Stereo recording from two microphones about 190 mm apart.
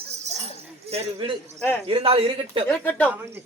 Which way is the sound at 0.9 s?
30° right (ahead or behind).